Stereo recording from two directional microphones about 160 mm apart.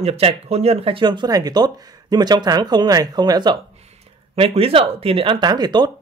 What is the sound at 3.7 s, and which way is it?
Speech, 40° right (ahead or behind).